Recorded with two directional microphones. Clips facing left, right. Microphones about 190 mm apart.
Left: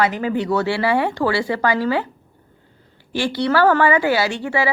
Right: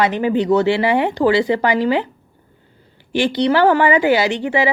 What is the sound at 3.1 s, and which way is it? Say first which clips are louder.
A woman's voice: right 3 dB; 20° right (ahead or behind).